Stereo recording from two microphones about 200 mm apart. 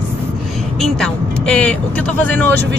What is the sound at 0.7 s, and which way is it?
Speech, centre (ahead or behind).